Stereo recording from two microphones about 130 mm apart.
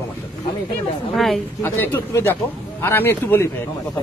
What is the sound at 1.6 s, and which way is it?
Speech, 20° left (ahead or behind).